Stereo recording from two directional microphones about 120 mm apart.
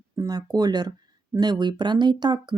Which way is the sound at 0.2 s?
30° right (ahead or behind).